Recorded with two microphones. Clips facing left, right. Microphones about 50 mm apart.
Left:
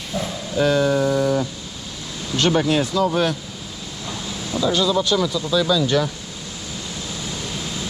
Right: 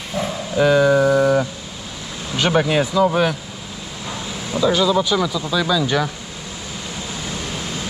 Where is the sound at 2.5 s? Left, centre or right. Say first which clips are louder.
Right 2 dB; right.